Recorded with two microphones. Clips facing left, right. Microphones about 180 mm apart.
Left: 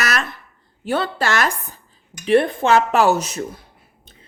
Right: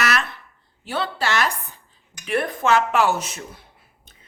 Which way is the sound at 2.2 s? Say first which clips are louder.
Left 7 dB; 30° left (ahead or behind).